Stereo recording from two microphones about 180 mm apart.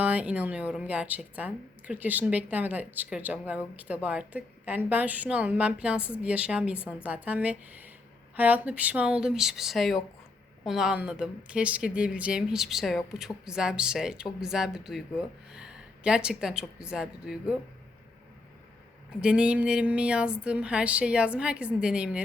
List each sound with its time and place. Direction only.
0.0 s a woman's voice: 10° right (ahead or behind)
19.2 s speech: 5° right (ahead or behind)